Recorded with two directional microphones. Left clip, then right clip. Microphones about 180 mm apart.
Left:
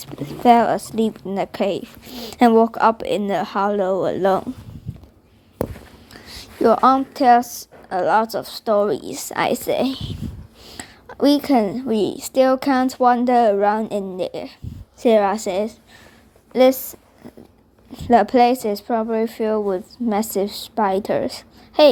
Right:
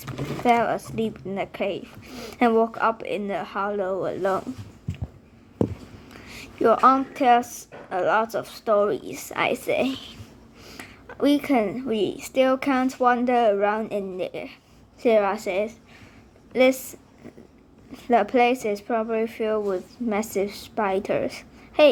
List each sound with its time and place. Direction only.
0.4 s a woman's voice: 40° left (ahead or behind)
6.1 s a sound: 35° left (ahead or behind)
7.5 s a woman's voice: 40° left (ahead or behind)
16.5 s a woman's voice: 30° left (ahead or behind)
17.9 s a woman's voice: 40° left (ahead or behind)